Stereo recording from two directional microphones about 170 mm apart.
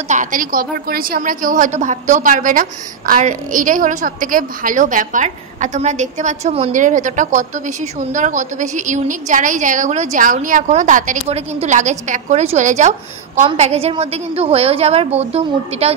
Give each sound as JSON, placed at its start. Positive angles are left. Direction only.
{"t": 0.1, "sound": "a woman's voice", "side_deg": -50}